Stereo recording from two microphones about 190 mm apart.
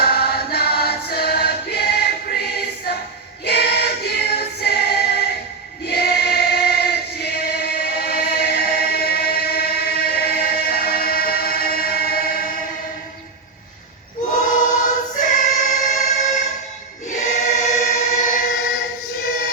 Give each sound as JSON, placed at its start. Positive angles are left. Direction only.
{"t": 0.0, "sound": "choir", "side_deg": 55}
{"t": 3.4, "sound": "choir", "side_deg": 60}
{"t": 14.3, "sound": "choir", "side_deg": 45}